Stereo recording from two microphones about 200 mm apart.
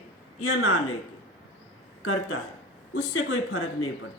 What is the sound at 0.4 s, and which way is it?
Speech, 75° left (ahead or behind).